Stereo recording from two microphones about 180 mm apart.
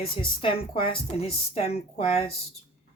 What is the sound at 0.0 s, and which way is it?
A woman's voice, 30° left (ahead or behind).